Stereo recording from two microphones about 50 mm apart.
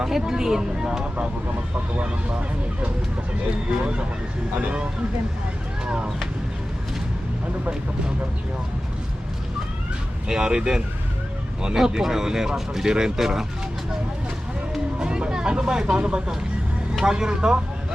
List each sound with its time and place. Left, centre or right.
0.0 s speech: centre
5.8 s speech: right
10.2 s speech: centre
14.9 s speech: centre